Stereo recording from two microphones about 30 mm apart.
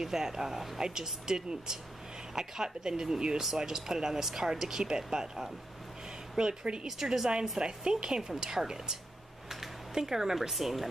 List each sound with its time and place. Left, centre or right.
0.0 s speech: centre
7.0 s speech: centre
7.8 s speech: right
9.9 s speech: centre
10.5 s speech: centre